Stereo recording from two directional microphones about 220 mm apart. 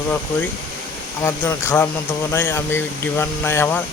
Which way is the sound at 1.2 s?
10° left (ahead or behind).